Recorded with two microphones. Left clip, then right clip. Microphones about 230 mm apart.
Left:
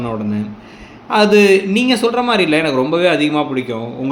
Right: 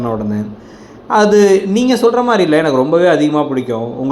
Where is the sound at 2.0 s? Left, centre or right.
Centre.